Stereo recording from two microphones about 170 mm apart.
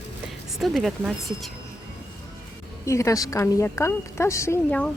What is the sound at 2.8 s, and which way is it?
A woman's voice, 20° left (ahead or behind).